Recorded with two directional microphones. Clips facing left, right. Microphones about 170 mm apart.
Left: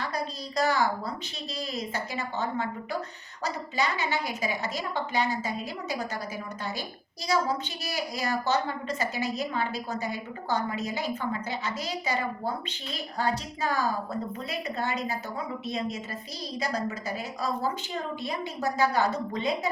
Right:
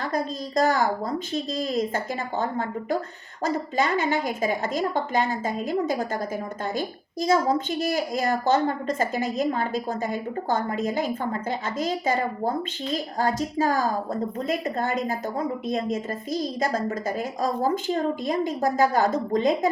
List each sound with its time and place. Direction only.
0.0 s a woman's voice: 50° right (ahead or behind)